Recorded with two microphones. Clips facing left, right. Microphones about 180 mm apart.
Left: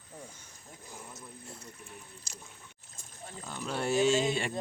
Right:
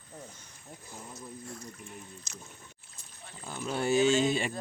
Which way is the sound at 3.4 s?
Centre (ahead or behind).